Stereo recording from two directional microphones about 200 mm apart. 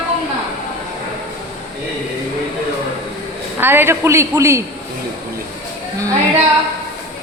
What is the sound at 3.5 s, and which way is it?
A woman's voice, 10° right (ahead or behind).